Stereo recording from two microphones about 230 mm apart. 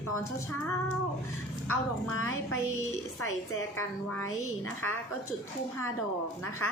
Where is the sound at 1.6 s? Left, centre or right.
Left.